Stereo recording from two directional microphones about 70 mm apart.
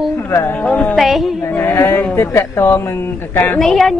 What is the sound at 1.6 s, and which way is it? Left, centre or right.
Speech, left.